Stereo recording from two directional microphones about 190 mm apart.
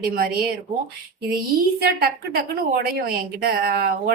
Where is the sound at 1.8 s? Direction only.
55° right (ahead or behind).